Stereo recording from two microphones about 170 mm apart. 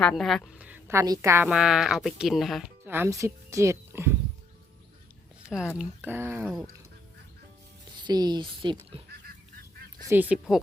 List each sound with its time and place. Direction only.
0.0 s a woman's voice: 5° left (ahead or behind)
2.8 s speech: 10° right (ahead or behind)
5.4 s a sound: 5° right (ahead or behind)
5.7 s speech: 10° right (ahead or behind)
7.9 s speech: 25° right (ahead or behind)
10.1 s a woman's voice: 10° right (ahead or behind)